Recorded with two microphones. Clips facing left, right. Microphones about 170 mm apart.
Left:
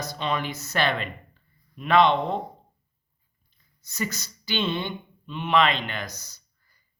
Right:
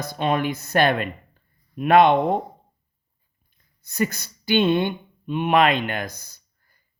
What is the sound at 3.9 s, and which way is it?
Speech, 55° right (ahead or behind).